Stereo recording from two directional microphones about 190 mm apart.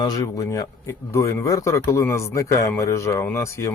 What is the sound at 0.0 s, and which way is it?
Speech, 20° left (ahead or behind).